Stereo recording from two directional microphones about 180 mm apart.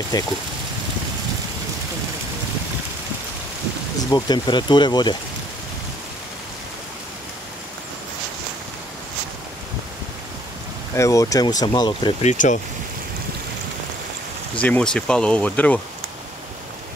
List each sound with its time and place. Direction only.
0.1 s speech: 20° left (ahead or behind)
4.1 s speech: 25° left (ahead or behind)
11.0 s speech: 15° left (ahead or behind)
12.2 s speech: 40° left (ahead or behind)
14.6 s speech: 5° left (ahead or behind)